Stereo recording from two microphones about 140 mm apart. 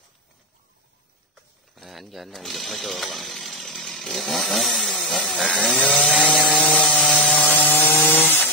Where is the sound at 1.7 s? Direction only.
Centre (ahead or behind).